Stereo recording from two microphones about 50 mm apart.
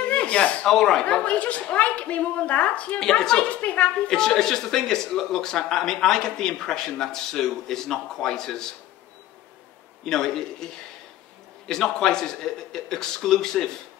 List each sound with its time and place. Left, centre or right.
0.0 s a sound: left
0.7 s speech: centre
1.0 s a woman's voice: left
3.0 s speech: centre
3.4 s a woman's voice: left
4.2 s speech: centre
10.0 s speech: centre